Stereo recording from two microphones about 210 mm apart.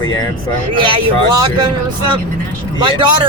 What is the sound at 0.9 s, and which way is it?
Speech, 20° right (ahead or behind).